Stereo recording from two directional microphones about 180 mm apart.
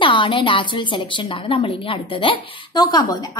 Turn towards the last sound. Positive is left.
turn(degrees=20)  # may be behind; listen again after turning